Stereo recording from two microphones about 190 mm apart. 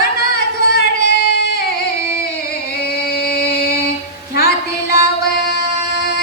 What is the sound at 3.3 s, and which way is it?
Music, 55° left (ahead or behind).